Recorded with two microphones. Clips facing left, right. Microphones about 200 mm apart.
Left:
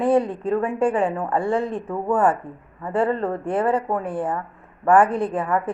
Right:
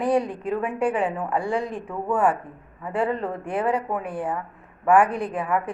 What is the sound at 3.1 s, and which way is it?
Speech, 30° left (ahead or behind).